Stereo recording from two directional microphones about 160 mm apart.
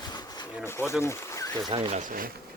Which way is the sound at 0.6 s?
15° left (ahead or behind).